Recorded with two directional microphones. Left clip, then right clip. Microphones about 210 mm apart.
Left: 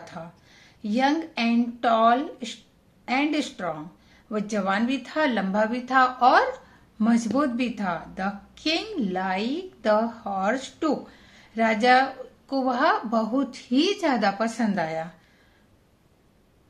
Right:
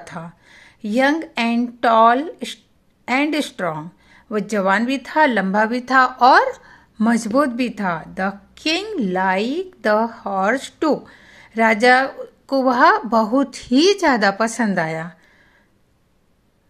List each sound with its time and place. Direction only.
0.0 s a woman's voice: 50° right (ahead or behind)